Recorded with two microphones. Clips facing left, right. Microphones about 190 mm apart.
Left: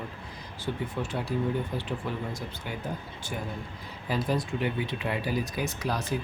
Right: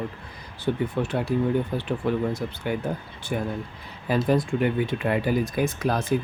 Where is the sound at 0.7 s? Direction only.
55° right (ahead or behind).